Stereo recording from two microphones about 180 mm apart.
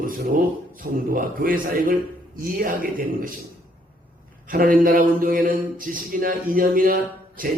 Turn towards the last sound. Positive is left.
turn(degrees=-50)  # may be behind; listen again after turning